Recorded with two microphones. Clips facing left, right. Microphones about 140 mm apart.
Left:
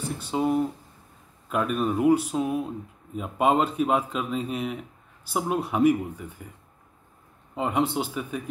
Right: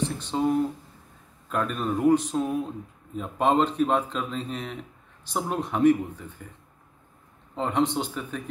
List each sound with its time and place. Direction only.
0.0 s a sound: 10° left (ahead or behind)
1.5 s speech: 10° left (ahead or behind)
7.5 s speech: 10° left (ahead or behind)